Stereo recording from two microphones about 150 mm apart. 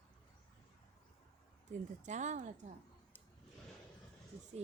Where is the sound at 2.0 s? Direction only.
50° right (ahead or behind).